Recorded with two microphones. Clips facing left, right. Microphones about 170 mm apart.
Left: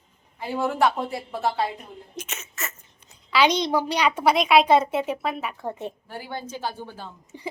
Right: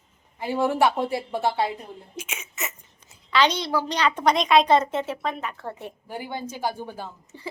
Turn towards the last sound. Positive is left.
turn(degrees=15)  # may be behind; listen again after turning